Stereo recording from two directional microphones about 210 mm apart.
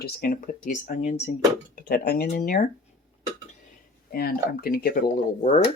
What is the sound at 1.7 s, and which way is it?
Speech, 45° left (ahead or behind).